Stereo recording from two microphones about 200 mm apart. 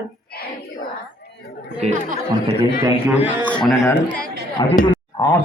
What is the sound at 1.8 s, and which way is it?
Speech, 40° right (ahead or behind).